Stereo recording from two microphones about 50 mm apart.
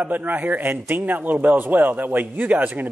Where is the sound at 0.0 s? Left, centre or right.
Right.